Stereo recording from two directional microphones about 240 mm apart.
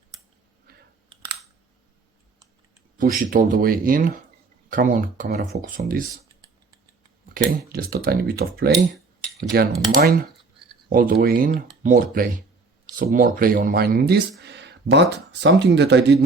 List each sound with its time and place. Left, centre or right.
0.7 s clicking: right
3.0 s speech: right
7.3 s speech: right